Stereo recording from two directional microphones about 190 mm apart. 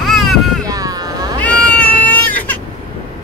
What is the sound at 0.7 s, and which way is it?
Vehicle, 20° right (ahead or behind).